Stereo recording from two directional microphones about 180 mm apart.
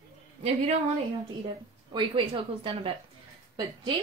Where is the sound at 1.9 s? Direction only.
25° right (ahead or behind).